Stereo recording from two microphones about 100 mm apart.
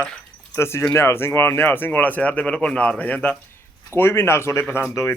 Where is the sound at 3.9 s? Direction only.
25° left (ahead or behind).